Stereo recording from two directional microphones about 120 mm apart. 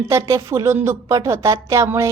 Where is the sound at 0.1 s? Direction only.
25° right (ahead or behind).